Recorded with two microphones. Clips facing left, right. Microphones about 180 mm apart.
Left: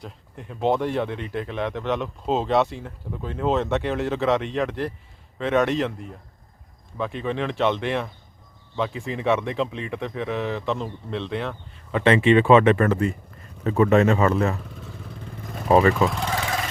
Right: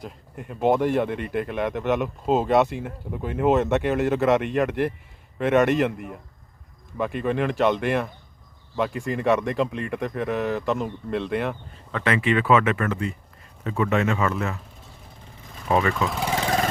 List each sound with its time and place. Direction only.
0.0 s speech: 5° right (ahead or behind)
6.9 s speech: 5° right (ahead or behind)
12.0 s speech: 25° left (ahead or behind)
14.8 s vehicle: 60° left (ahead or behind)
15.7 s speech: 35° left (ahead or behind)
16.0 s speech: 5° right (ahead or behind)